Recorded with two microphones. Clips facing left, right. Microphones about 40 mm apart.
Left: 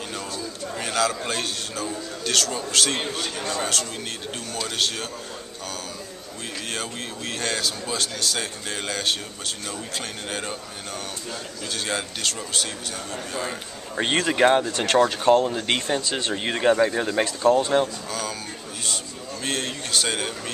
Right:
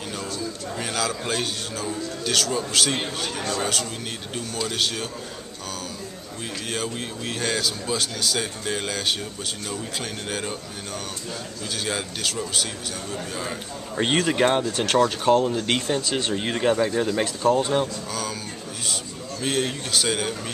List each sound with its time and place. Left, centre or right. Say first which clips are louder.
0.7 s a man's voice: left 4 dB; centre
6.7 s a man's voice: right 4 dB; centre
11.7 s a man's voice: even; centre
19.4 s a man's voice: right 3 dB; centre